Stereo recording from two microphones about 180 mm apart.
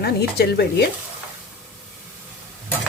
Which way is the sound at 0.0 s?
60° left (ahead or behind).